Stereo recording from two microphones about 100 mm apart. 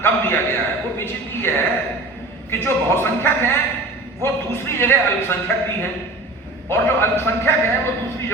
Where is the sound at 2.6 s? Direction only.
25° left (ahead or behind).